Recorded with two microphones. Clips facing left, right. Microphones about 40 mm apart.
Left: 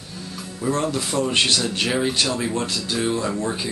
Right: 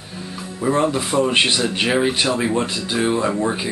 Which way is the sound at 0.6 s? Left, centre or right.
Right.